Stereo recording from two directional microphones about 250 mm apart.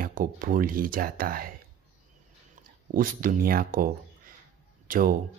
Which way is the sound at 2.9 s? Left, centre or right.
Right.